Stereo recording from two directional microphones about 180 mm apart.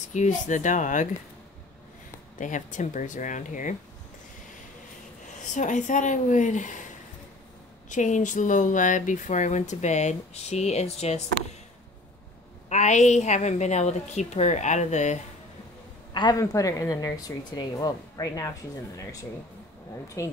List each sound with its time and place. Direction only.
0.1 s speech: 40° left (ahead or behind)
2.3 s speech: 45° left (ahead or behind)
5.4 s speech: 45° left (ahead or behind)
7.9 s speech: 45° left (ahead or behind)
12.6 s a woman's voice: 40° left (ahead or behind)
16.1 s a woman's voice: 25° left (ahead or behind)
20.2 s speech: 15° left (ahead or behind)